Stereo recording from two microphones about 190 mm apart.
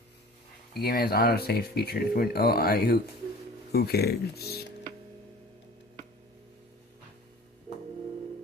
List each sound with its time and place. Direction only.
0.7 s speech: 55° left (ahead or behind)